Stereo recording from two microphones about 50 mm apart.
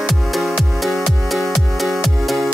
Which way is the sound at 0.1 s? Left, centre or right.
Centre.